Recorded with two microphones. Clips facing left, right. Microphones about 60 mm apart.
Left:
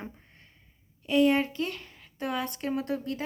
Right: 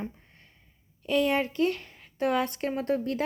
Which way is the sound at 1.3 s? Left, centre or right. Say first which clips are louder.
Right 1 dB; right.